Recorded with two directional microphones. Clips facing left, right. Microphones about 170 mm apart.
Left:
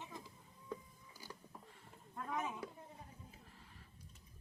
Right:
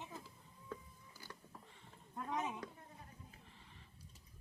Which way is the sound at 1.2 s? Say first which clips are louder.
Left 2 dB; 10° left (ahead or behind).